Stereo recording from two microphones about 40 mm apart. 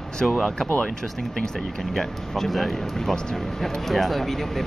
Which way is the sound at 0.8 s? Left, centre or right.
Centre.